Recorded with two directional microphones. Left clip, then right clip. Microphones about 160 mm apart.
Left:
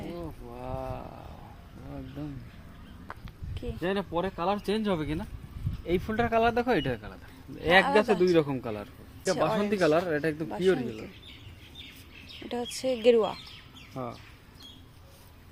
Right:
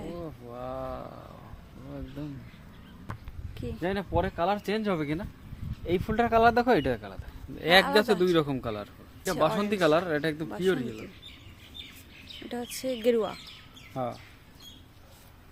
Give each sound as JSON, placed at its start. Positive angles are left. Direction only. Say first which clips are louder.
{"t": 0.0, "sound": "a sound", "louder": "even", "side_deg": -15}
{"t": 0.5, "sound": "a sound", "louder": "right 1 dB", "side_deg": -30}
{"t": 3.6, "sound": "a man's voice", "louder": "left 1 dB", "side_deg": -30}
{"t": 9.3, "sound": "a man's voice", "louder": "right 1 dB", "side_deg": -5}
{"t": 9.6, "sound": "speech", "louder": "even", "side_deg": -30}
{"t": 10.5, "sound": "speech", "louder": "left 2 dB", "side_deg": -10}
{"t": 12.5, "sound": "speech", "louder": "left 3 dB", "side_deg": -5}
{"t": 13.9, "sound": "speech", "louder": "right 5 dB", "side_deg": -55}